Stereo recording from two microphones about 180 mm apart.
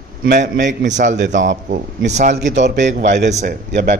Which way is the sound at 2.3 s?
75° right (ahead or behind).